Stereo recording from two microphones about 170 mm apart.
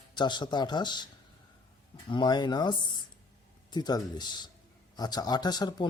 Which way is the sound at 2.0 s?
25° left (ahead or behind).